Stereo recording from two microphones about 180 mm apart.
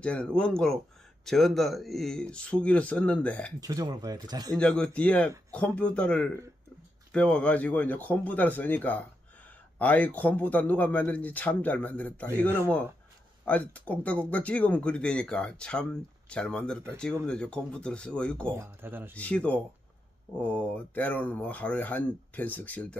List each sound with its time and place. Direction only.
0.0 s speech: 5° left (ahead or behind)
3.6 s speech: 20° right (ahead or behind)
4.6 s speech: 5° left (ahead or behind)
12.3 s speech: 15° right (ahead or behind)
13.5 s speech: 10° left (ahead or behind)
18.6 s speech: 10° right (ahead or behind)
19.1 s speech: 5° left (ahead or behind)